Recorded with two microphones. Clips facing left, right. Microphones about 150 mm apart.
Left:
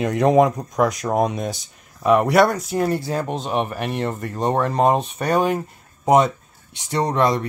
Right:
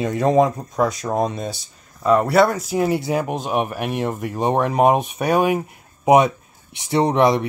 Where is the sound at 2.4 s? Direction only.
5° right (ahead or behind).